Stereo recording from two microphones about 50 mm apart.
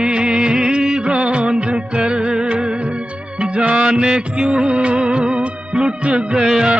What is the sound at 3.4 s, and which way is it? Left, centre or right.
Music, right.